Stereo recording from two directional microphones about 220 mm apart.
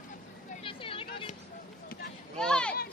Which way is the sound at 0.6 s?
25° left (ahead or behind).